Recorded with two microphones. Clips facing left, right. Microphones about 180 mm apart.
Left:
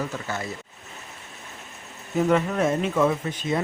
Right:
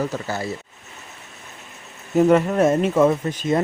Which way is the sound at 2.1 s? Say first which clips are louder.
Right 6 dB; 45° right (ahead or behind).